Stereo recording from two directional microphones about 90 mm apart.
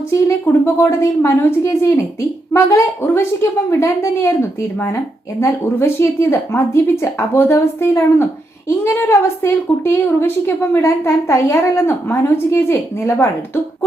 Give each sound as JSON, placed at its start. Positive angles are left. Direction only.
{"t": 0.1, "sound": "speech", "side_deg": 30}